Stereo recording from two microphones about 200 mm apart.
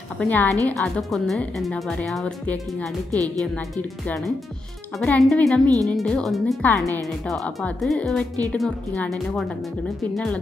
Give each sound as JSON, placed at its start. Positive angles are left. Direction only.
{"t": 0.2, "sound": "speech", "side_deg": 10}